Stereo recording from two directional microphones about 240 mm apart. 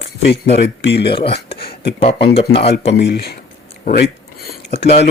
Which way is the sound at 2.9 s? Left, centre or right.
Left.